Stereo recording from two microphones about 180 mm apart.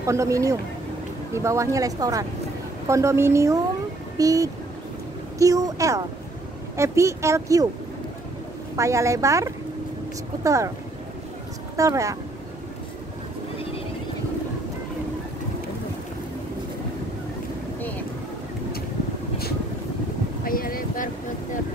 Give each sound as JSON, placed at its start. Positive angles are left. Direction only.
{"t": 0.0, "sound": "speech", "side_deg": -15}
{"t": 8.7, "sound": "speech", "side_deg": -15}
{"t": 11.7, "sound": "speech", "side_deg": -15}
{"t": 20.4, "sound": "boat", "side_deg": 50}